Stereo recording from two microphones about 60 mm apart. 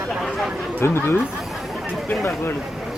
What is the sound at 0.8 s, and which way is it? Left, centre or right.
Speech, left.